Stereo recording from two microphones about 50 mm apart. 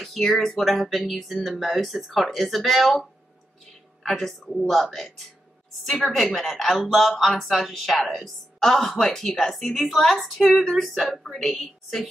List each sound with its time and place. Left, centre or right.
0.0 s speech: centre